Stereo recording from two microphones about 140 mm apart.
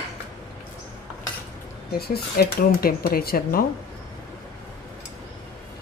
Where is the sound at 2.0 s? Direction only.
90° left.